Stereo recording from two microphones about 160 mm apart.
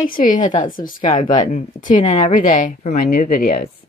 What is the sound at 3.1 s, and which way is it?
Speech, 65° left (ahead or behind).